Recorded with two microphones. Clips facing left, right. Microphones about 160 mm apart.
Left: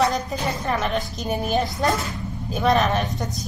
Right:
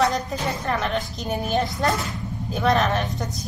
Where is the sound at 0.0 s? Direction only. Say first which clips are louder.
Even; centre (ahead or behind).